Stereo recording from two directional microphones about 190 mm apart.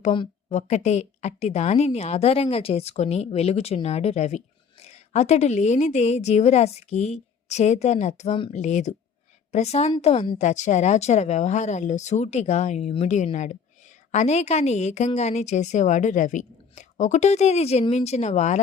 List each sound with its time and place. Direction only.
0.0 s a woman's voice: 30° left (ahead or behind)